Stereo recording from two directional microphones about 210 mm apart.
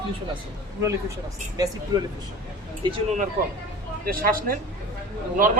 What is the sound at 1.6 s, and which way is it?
Speech, 15° right (ahead or behind).